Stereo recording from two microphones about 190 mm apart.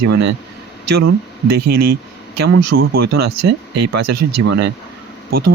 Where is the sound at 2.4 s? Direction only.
60° right (ahead or behind).